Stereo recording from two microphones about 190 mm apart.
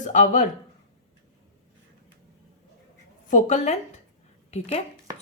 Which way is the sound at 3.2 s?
40° left (ahead or behind).